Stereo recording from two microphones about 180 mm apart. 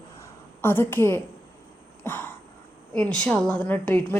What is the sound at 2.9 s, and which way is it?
A woman's voice, 5° left (ahead or behind).